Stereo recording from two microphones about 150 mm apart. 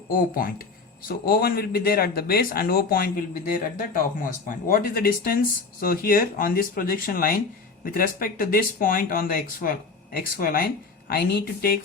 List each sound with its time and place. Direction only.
0.1 s speech: 70° left (ahead or behind)
3.8 s speech: 65° left (ahead or behind)
11.1 s speech: 85° left